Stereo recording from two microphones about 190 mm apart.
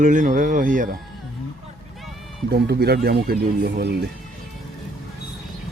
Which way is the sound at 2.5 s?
55° right (ahead or behind).